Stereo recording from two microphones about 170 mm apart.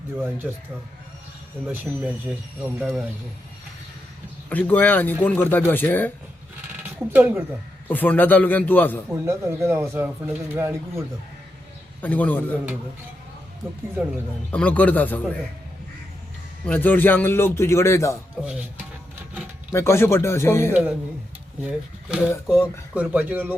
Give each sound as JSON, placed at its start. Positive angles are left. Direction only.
{"t": 0.4, "sound": "speech", "side_deg": -5}
{"t": 1.6, "sound": "speech", "side_deg": -10}
{"t": 4.4, "sound": "speech", "side_deg": 10}
{"t": 7.0, "sound": "speech", "side_deg": -10}
{"t": 7.9, "sound": "speech", "side_deg": 10}
{"t": 9.0, "sound": "speech", "side_deg": -15}
{"t": 12.0, "sound": "speech", "side_deg": 10}
{"t": 14.5, "sound": "speech", "side_deg": 10}
{"t": 16.6, "sound": "speech", "side_deg": 10}
{"t": 19.7, "sound": "speech", "side_deg": 15}
{"t": 21.6, "sound": "speech", "side_deg": -5}